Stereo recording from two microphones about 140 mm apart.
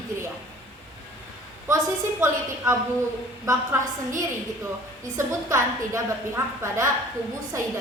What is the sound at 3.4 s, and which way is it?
Speech, 20° right (ahead or behind).